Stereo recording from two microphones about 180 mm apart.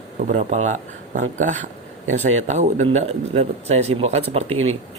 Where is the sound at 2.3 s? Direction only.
40° right (ahead or behind).